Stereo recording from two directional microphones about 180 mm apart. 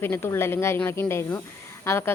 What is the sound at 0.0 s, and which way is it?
Speech, 15° left (ahead or behind).